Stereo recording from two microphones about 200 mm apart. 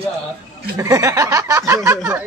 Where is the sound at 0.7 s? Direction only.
15° right (ahead or behind).